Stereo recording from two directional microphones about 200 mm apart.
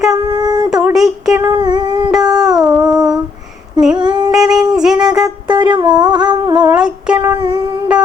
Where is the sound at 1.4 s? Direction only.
20° right (ahead or behind).